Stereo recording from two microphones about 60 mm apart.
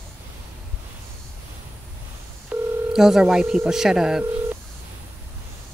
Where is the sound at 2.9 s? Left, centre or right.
Centre.